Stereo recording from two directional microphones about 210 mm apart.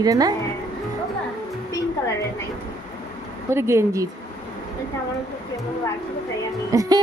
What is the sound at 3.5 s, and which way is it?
Speech, 10° right (ahead or behind).